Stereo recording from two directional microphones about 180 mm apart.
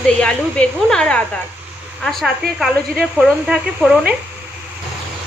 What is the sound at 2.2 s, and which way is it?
A woman's voice, centre (ahead or behind).